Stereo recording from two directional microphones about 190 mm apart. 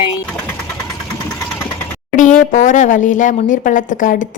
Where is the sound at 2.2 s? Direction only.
40° left (ahead or behind).